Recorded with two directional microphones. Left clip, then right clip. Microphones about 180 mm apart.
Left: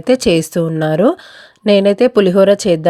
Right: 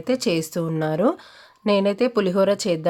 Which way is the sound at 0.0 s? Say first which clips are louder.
Left 10 dB; 35° left (ahead or behind).